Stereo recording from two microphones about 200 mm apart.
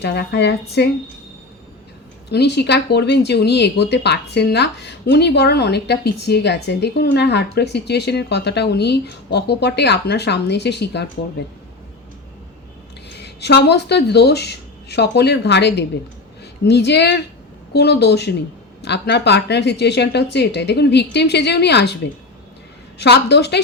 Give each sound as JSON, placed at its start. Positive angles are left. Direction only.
{"t": 0.0, "sound": "speech", "side_deg": 60}
{"t": 2.3, "sound": "speech", "side_deg": 55}
{"t": 13.1, "sound": "speech", "side_deg": 55}